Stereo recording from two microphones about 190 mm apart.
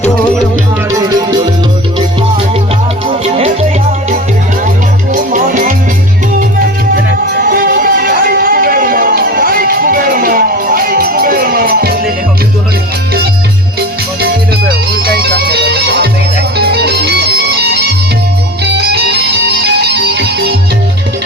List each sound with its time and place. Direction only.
0.9 s music: 15° right (ahead or behind)
3.1 s music: 30° right (ahead or behind)
5.1 s music: 45° right (ahead or behind)
7.5 s music: 50° right (ahead or behind)
15.4 s music: 55° right (ahead or behind)